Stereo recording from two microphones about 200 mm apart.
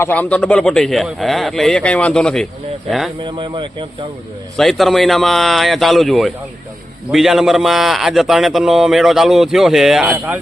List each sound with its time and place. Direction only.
0.0 s a man's voice: 10° left (ahead or behind)
3.2 s speech: 25° right (ahead or behind)
4.5 s a man's voice: centre (ahead or behind)